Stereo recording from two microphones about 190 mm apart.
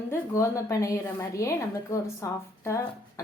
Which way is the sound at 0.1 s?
15° left (ahead or behind).